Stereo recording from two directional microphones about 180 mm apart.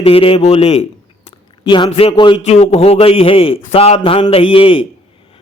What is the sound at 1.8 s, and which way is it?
A man's voice, 30° left (ahead or behind).